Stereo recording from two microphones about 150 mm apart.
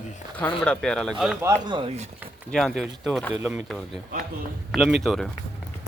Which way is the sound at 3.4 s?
20° right (ahead or behind).